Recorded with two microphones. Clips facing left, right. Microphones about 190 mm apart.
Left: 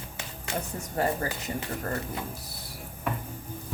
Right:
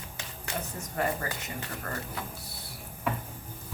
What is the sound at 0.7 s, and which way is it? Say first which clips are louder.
Speech: left 3 dB; 30° left (ahead or behind).